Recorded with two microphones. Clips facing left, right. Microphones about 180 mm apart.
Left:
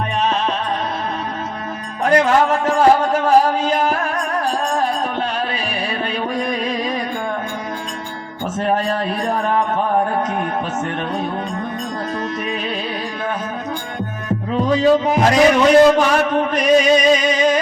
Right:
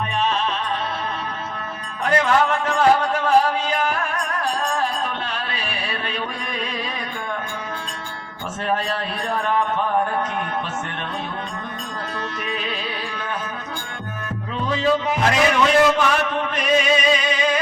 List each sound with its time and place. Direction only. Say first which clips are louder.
2.0 s music: left 4 dB; 40° left (ahead or behind)
8.6 s a sound: left 5 dB; 40° left (ahead or behind)
14.5 s music: left 6 dB; 40° left (ahead or behind)